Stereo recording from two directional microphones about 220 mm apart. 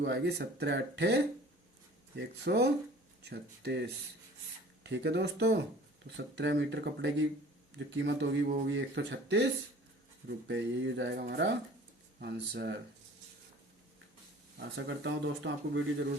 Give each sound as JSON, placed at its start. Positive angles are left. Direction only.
{"t": 0.0, "sound": "speech", "side_deg": -50}
{"t": 14.8, "sound": "speech", "side_deg": -60}